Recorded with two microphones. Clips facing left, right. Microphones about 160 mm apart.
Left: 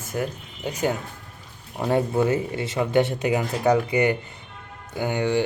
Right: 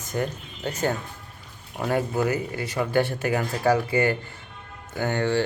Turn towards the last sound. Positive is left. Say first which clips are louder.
# left 1 dB
turn(degrees=15)  # may be behind; listen again after turning